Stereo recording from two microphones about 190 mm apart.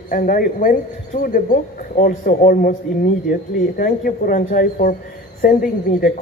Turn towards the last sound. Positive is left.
turn(degrees=45)  # may be behind; listen again after turning